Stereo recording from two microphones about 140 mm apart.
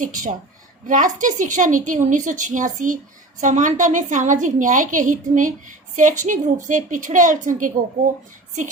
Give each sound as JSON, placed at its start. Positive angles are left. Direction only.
{"t": 0.0, "sound": "a woman's voice", "side_deg": -70}